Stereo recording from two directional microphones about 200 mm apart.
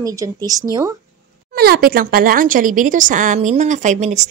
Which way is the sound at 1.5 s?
50° right (ahead or behind).